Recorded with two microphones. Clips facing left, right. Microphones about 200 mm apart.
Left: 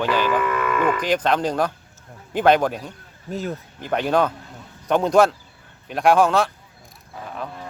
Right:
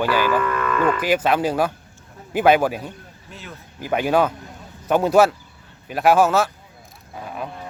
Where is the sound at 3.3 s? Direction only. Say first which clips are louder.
Left 12 dB; 40° left (ahead or behind).